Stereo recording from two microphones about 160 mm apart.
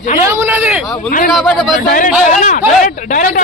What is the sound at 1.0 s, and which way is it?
Speech, 60° left (ahead or behind).